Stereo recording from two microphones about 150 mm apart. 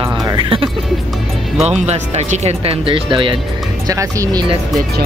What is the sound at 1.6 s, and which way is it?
Speech, 45° right (ahead or behind).